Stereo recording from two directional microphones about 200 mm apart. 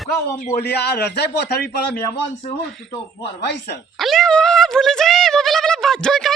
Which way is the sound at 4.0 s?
Centre (ahead or behind).